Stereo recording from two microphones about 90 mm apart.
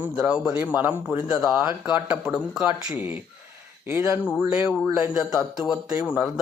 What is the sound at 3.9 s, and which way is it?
Speech, 30° right (ahead or behind).